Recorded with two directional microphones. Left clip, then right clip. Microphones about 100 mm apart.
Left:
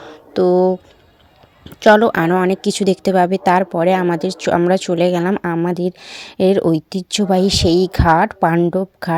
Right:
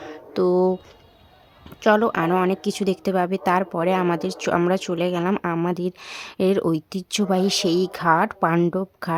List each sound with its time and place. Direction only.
0.0 s a sound: 35° left (ahead or behind)
1.7 s a woman's voice: 45° left (ahead or behind)
5.6 s a woman's voice: 30° left (ahead or behind)